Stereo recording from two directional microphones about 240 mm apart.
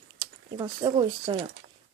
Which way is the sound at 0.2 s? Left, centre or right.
Centre.